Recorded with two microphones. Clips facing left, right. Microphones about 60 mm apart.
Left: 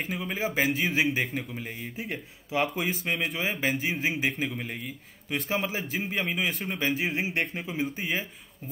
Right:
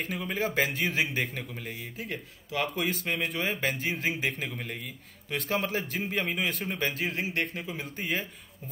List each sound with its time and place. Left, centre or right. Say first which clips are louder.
0.0 s a man's voice: even; centre
7.0 s a man's voice: left 2 dB; centre